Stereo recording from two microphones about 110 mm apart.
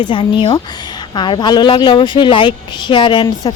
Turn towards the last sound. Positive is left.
turn(degrees=35)  # may be behind; listen again after turning